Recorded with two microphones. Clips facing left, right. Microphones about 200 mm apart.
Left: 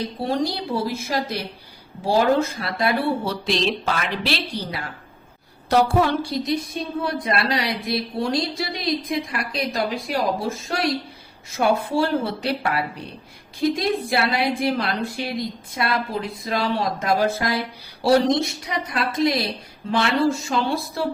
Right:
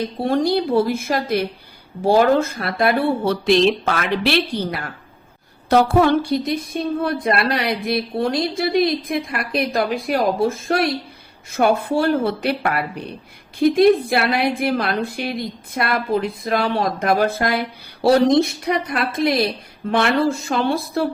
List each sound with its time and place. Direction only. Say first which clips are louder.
0.3 s a woman's voice: right 7 dB; 55° right (ahead or behind)